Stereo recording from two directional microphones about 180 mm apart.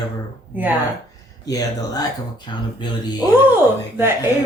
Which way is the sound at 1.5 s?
20° left (ahead or behind).